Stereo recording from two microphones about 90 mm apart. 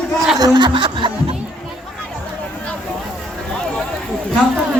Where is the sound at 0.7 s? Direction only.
70° right (ahead or behind).